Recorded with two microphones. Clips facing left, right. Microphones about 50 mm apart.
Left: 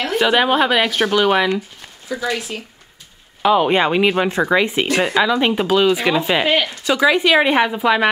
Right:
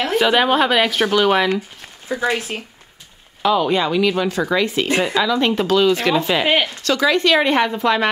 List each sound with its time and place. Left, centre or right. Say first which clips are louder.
0.1 s a woman's voice: left 1 dB; centre
2.0 s speech: right 2 dB; right
3.4 s speech: left 2 dB; left
6.4 s speech: even; centre
6.8 s speech: left 2 dB; centre